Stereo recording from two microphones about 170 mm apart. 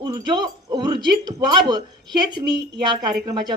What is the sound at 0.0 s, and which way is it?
Speech, 25° right (ahead or behind).